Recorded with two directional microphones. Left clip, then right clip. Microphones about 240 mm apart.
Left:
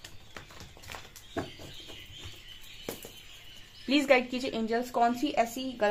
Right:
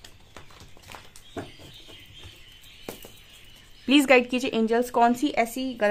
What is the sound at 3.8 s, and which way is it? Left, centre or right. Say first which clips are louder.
A woman's voice: right 6 dB; right.